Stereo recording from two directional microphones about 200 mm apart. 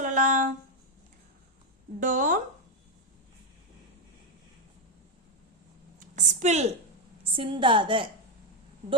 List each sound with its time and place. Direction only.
0.0 s a sound: 40° right (ahead or behind)
2.0 s a woman's voice: 40° right (ahead or behind)
6.1 s a woman's voice: 35° right (ahead or behind)